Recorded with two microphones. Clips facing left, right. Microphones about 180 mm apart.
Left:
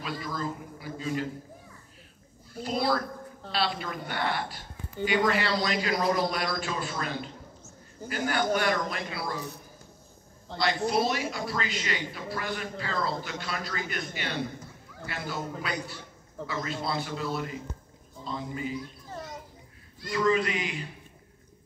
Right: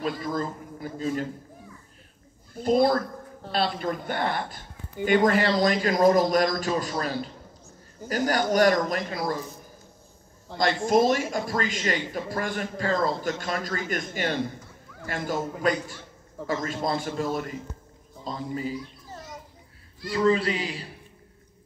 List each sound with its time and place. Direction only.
0.0 s speech: 45° right (ahead or behind)
2.5 s a man's voice: 50° right (ahead or behind)
10.5 s speech: 10° right (ahead or behind)
10.9 s a man's voice: 45° right (ahead or behind)
20.1 s a man's voice: 30° right (ahead or behind)